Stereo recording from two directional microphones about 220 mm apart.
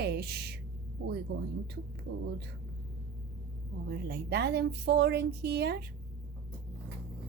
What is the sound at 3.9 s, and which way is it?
A woman's voice, 50° right (ahead or behind).